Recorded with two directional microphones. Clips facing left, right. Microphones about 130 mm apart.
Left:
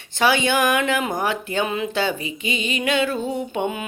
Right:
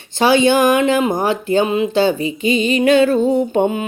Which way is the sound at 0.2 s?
30° right (ahead or behind).